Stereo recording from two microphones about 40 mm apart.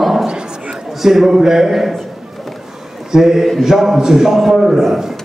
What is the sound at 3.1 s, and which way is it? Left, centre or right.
A man's voice, centre.